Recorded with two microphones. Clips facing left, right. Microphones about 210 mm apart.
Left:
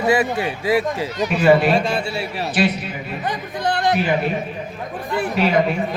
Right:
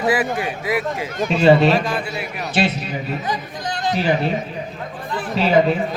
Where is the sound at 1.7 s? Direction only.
25° left (ahead or behind).